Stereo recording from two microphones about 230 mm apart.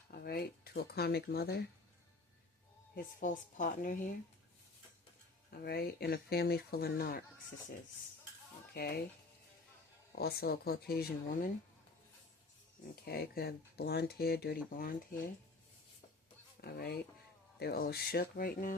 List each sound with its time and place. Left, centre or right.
0.3 s speech: left
2.9 s speech: left
5.5 s speech: left
8.7 s speech: left
10.2 s speech: left
13.1 s speech: left
16.6 s speech: left